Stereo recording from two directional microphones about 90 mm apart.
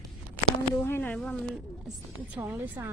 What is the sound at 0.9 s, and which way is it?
Speech, 25° left (ahead or behind).